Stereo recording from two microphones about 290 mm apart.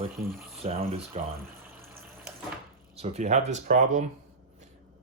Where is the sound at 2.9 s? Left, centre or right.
Right.